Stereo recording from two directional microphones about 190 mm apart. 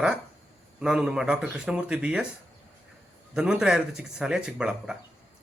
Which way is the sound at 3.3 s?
5° right (ahead or behind).